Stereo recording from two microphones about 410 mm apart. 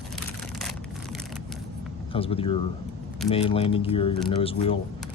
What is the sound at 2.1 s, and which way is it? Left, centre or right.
Speech, centre.